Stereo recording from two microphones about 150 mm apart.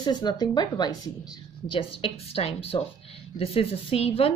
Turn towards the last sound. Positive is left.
turn(degrees=40)  # may be behind; listen again after turning